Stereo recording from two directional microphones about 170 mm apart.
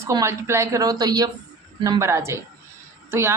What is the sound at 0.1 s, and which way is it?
A woman's voice, 15° right (ahead or behind).